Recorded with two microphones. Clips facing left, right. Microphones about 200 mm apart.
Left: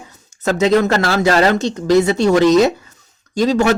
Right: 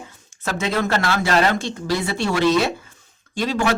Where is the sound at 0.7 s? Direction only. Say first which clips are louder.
Left 4 dB; 40° left (ahead or behind).